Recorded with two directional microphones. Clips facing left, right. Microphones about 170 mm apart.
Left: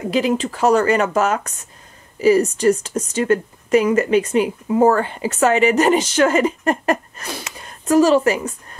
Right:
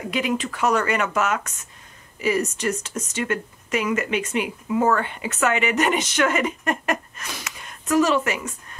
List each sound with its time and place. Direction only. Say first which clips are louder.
0.1 s speech: left 6 dB; 35° left (ahead or behind)